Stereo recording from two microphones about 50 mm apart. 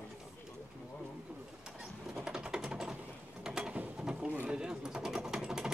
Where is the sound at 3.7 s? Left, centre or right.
Right.